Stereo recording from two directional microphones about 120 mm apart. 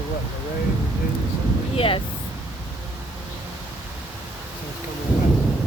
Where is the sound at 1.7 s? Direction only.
50° left (ahead or behind).